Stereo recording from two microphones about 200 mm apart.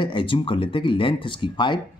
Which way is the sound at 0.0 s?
25° left (ahead or behind).